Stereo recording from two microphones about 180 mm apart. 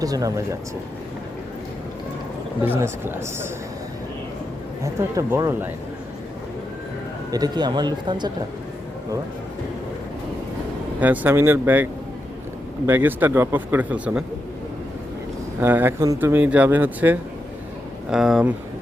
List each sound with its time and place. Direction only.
0.0 s speech: 20° right (ahead or behind)
2.6 s speech: 10° right (ahead or behind)
4.8 s speech: 15° right (ahead or behind)
7.3 s speech: 20° right (ahead or behind)
11.0 s speech: 10° right (ahead or behind)
15.6 s speech: 10° right (ahead or behind)